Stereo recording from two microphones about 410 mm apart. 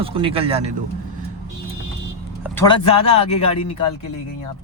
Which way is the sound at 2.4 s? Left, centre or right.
Centre.